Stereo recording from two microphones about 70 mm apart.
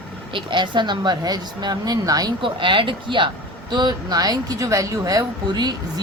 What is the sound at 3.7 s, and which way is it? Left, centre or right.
Speech, right.